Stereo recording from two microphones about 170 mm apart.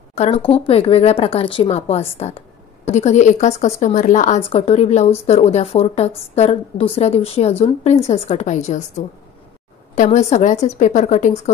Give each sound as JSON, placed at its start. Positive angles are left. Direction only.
{"t": 0.1, "sound": "a woman's voice", "side_deg": 40}